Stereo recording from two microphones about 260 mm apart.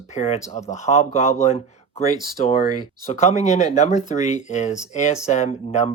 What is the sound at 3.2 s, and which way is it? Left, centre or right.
Speech, left.